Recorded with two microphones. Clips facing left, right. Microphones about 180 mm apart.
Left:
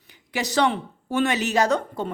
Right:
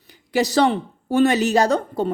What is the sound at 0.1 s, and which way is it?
A woman's voice, 35° right (ahead or behind).